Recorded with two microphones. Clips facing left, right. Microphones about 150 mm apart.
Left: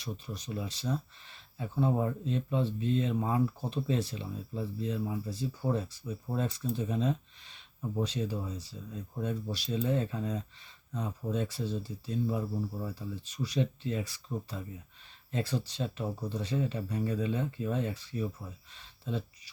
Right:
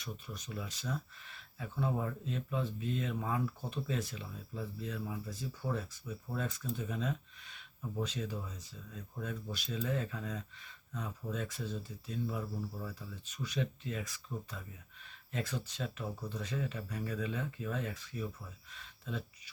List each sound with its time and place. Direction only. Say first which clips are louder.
0.0 s speech: left 5 dB; 30° left (ahead or behind)